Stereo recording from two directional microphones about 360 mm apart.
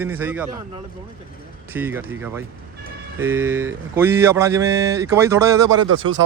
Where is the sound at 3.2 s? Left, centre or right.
Centre.